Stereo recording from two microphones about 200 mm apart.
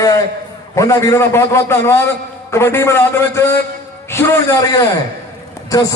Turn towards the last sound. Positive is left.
turn(degrees=15)  # may be behind; listen again after turning